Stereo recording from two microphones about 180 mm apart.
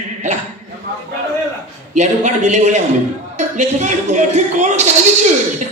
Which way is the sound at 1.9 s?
40° right (ahead or behind).